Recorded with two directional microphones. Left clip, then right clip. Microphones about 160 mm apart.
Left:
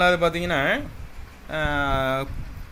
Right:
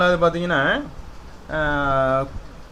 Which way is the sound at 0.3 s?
20° left (ahead or behind).